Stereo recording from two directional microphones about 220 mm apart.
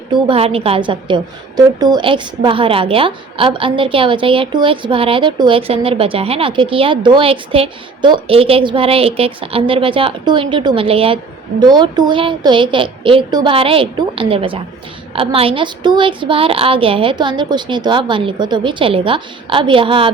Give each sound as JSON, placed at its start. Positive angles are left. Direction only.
{"t": 0.1, "sound": "a woman's voice", "side_deg": -25}